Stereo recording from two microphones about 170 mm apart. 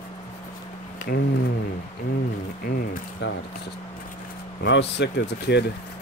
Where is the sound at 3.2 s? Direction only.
90° left.